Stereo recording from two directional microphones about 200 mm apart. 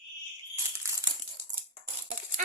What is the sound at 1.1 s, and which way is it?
Crumpling, 20° right (ahead or behind).